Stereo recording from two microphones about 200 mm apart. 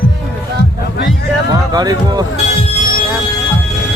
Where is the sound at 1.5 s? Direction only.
20° right (ahead or behind).